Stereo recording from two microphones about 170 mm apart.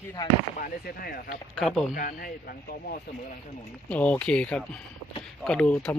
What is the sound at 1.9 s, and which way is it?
Speech, 60° left (ahead or behind).